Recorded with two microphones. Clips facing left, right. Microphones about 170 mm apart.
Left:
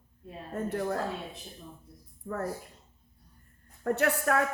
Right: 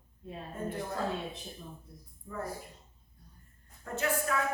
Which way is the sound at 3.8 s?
65° left (ahead or behind).